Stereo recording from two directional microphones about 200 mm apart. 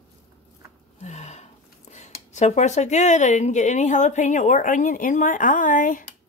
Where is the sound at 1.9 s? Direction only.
35° left (ahead or behind).